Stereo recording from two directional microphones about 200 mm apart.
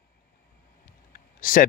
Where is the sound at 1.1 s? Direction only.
45° left (ahead or behind).